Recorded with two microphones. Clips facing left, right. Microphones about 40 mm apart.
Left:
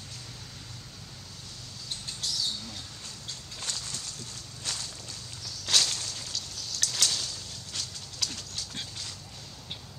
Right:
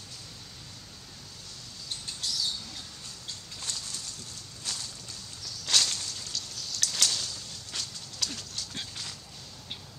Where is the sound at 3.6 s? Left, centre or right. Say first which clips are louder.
Left 2 dB; left.